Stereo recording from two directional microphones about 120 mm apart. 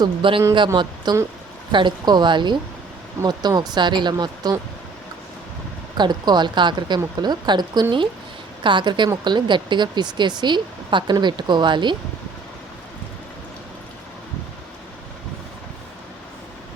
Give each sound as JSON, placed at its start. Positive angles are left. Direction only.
{"t": 0.0, "sound": "speech", "side_deg": -45}
{"t": 6.0, "sound": "speech", "side_deg": -35}